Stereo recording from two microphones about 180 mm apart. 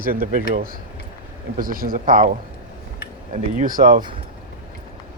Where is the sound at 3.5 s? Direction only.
50° right (ahead or behind).